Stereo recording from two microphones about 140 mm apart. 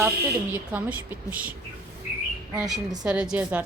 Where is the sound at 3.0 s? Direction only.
5° right (ahead or behind).